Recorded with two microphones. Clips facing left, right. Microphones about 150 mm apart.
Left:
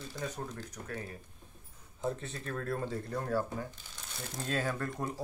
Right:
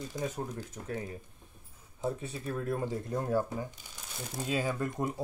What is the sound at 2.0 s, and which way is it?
Speech, 10° right (ahead or behind).